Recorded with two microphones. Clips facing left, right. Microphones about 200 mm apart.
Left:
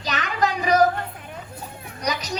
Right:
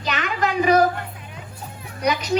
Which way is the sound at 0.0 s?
40° left (ahead or behind).